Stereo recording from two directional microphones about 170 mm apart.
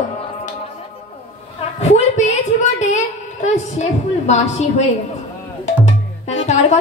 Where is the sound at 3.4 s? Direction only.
40° left (ahead or behind).